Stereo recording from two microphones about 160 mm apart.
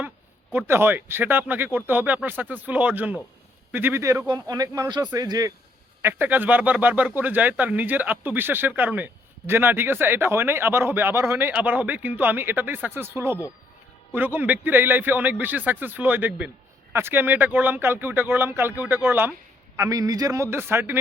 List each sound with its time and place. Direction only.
0.5 s speech: 15° right (ahead or behind)